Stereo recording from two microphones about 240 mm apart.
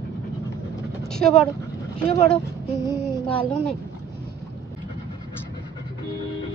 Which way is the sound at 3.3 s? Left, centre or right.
Centre.